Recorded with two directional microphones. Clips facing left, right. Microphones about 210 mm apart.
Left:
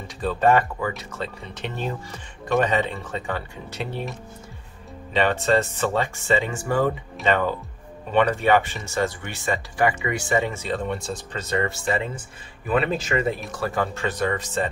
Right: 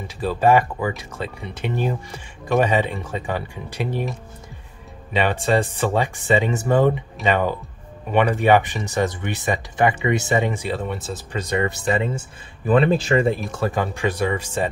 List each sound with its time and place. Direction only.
0.2 s speech: 10° right (ahead or behind)
5.1 s speech: 15° right (ahead or behind)
11.4 s speech: 15° right (ahead or behind)
12.6 s speech: 30° right (ahead or behind)
13.6 s speech: 20° right (ahead or behind)